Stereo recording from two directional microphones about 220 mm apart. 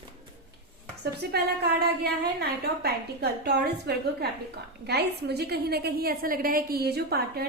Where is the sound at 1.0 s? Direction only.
50° right (ahead or behind).